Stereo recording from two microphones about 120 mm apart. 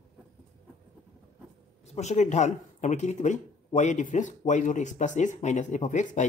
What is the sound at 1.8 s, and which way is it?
Speech, 70° left (ahead or behind).